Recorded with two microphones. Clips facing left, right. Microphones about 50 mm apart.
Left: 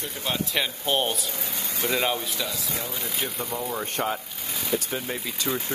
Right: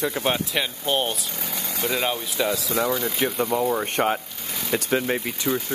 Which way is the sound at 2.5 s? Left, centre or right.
Right.